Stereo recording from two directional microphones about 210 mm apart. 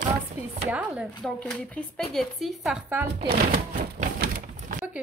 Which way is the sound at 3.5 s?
40° right (ahead or behind).